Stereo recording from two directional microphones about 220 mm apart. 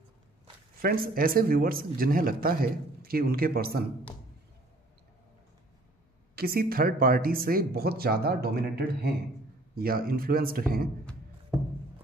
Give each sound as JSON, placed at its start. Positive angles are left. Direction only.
{"t": 0.7, "sound": "a man's voice", "side_deg": -40}
{"t": 6.3, "sound": "a man's voice", "side_deg": -45}